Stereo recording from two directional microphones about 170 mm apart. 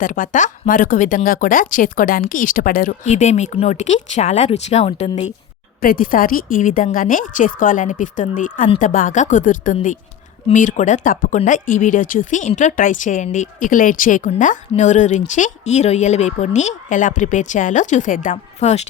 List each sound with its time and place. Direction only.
0.0 s speech: 50° left (ahead or behind)
5.8 s speech: 55° left (ahead or behind)